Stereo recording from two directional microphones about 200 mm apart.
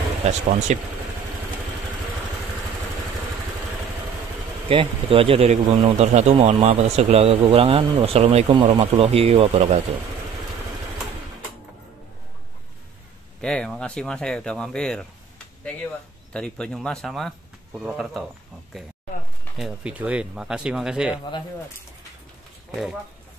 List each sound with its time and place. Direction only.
0.3 s speech: 35° right (ahead or behind)
4.6 s speech: 25° right (ahead or behind)
13.4 s speech: 5° left (ahead or behind)
19.5 s speech: 5° right (ahead or behind)